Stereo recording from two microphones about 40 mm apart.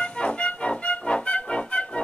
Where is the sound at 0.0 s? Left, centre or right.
Left.